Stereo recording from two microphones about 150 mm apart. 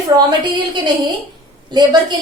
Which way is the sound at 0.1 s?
25° right (ahead or behind).